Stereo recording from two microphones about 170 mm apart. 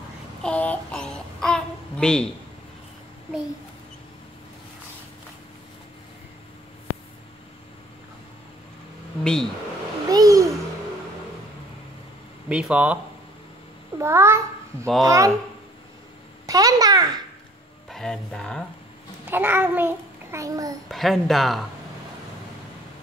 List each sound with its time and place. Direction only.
0.4 s child singing: 10° left (ahead or behind)
9.2 s speech: 5° left (ahead or behind)
10.0 s a sound: 20° right (ahead or behind)
12.4 s a child's voice: 5° right (ahead or behind)
16.4 s a child's voice: 20° right (ahead or behind)
17.8 s speech: 5° left (ahead or behind)
19.2 s a child's voice: 10° right (ahead or behind)
20.9 s a woman's voice: centre (ahead or behind)